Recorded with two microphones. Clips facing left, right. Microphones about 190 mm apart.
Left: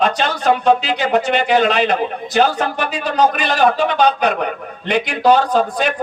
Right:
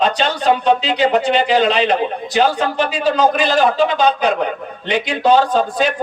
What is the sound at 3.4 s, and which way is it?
A man's voice, 60° left (ahead or behind).